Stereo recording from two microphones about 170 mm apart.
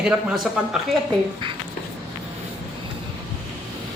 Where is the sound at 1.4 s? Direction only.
30° right (ahead or behind).